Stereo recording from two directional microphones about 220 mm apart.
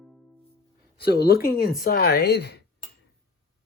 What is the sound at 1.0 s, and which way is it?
Speech, 45° left (ahead or behind).